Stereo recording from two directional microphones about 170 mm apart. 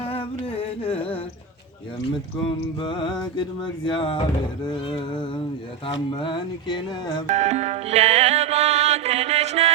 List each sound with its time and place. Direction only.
0.0 s music: 35° left (ahead or behind)
2.8 s music: 25° left (ahead or behind)
7.3 s music: 40° right (ahead or behind)